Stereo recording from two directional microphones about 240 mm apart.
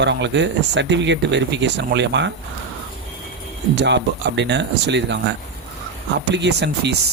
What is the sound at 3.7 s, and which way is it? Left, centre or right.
Speech, right.